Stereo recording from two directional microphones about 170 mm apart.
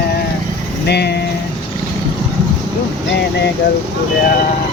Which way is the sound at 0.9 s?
75° left (ahead or behind).